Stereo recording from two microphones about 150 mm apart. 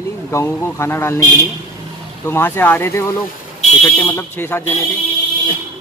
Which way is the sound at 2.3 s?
15° left (ahead or behind).